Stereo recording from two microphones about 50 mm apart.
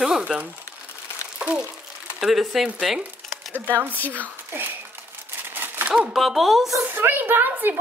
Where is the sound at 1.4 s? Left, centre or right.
Right.